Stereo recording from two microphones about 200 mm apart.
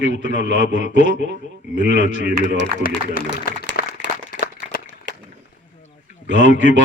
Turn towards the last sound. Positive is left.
turn(degrees=40)  # may be behind; listen again after turning